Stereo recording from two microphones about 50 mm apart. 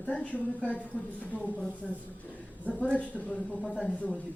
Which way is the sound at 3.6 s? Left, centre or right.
Centre.